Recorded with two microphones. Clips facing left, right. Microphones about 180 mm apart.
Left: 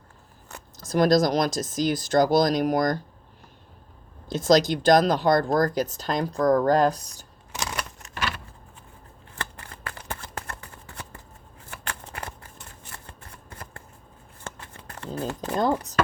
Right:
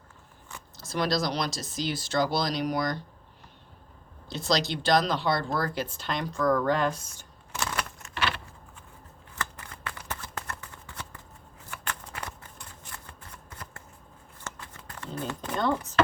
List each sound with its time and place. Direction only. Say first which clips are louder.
0.8 s speech: left 8 dB; 45° left (ahead or behind)
4.3 s speech: left 8 dB; 45° left (ahead or behind)
7.5 s typewriter: even; 20° left (ahead or behind)
9.9 s a sound: left 3 dB; 30° left (ahead or behind)
10.4 s shuffling cards: left 1 dB; 40° left (ahead or behind)
13.1 s shuffling cards: left 2 dB; 30° left (ahead or behind)
14.7 s a sound: left 5 dB; 30° left (ahead or behind)